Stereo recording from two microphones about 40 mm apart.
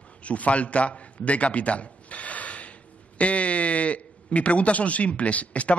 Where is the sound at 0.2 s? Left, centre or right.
Left.